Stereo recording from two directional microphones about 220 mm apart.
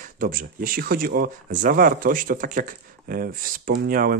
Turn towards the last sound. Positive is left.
turn(degrees=-40)  # may be behind; listen again after turning